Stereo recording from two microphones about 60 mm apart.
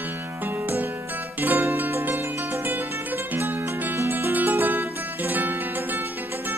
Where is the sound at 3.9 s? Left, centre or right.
Right.